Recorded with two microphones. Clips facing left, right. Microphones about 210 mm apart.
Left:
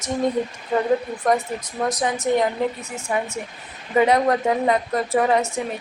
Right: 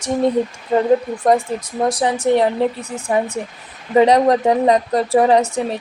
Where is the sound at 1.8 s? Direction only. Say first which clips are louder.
Right 5 dB; 30° right (ahead or behind).